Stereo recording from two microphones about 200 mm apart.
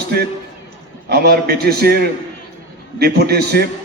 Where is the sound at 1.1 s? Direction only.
50° right (ahead or behind).